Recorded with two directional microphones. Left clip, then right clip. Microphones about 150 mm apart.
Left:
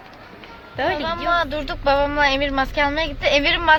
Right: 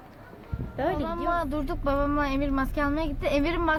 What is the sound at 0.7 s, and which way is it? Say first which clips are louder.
Speech: left 7 dB; 5° right (ahead or behind).